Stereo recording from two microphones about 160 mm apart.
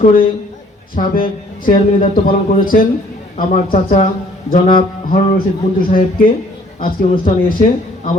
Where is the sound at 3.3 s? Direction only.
50° left (ahead or behind).